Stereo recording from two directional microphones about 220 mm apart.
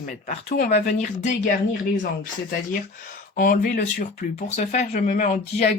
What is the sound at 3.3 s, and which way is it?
Speech, 40° left (ahead or behind).